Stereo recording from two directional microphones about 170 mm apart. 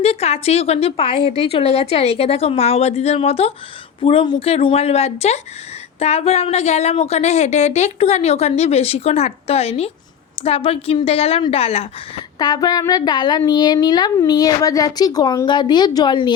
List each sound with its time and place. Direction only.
0.0 s a woman's voice: 35° left (ahead or behind)
12.4 s speech: 25° left (ahead or behind)